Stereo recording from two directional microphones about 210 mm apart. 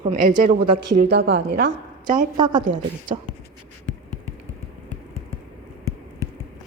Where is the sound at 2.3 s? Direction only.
20° right (ahead or behind).